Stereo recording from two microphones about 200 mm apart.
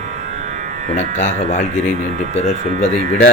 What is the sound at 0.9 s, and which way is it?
Speech, 35° left (ahead or behind).